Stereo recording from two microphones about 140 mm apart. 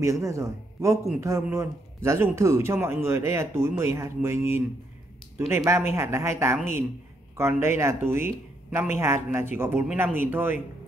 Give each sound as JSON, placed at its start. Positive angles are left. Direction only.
{"t": 0.0, "sound": "a man's voice", "side_deg": -20}